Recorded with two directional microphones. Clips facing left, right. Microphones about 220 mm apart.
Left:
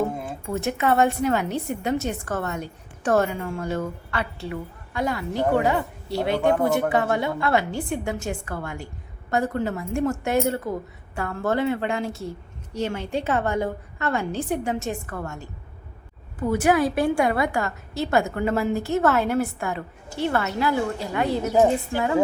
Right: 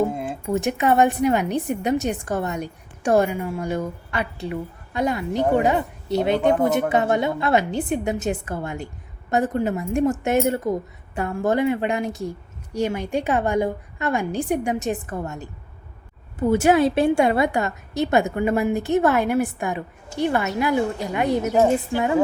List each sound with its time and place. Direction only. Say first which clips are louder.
0.3 s a woman's voice: right 4 dB; 15° right (ahead or behind)